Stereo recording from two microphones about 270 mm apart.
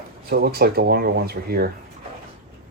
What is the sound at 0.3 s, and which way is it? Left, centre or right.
Speech, right.